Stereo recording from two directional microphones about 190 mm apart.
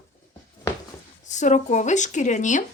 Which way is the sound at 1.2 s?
40° left (ahead or behind).